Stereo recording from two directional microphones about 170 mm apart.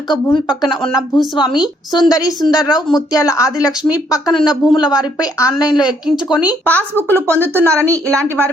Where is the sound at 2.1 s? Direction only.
20° left (ahead or behind).